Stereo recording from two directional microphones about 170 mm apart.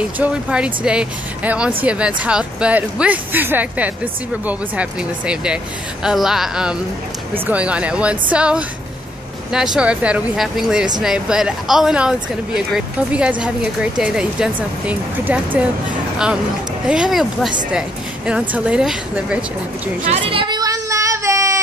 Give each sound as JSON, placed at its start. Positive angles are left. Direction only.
{"t": 0.2, "sound": "a woman's voice", "side_deg": -5}
{"t": 16.8, "sound": "a woman's voice", "side_deg": -5}
{"t": 20.1, "sound": "music", "side_deg": -30}